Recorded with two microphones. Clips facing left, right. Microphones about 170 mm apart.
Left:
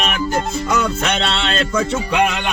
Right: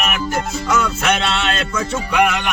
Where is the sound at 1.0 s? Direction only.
30° left (ahead or behind).